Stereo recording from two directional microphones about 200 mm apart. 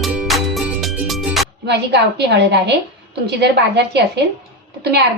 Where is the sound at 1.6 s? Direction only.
55° right (ahead or behind).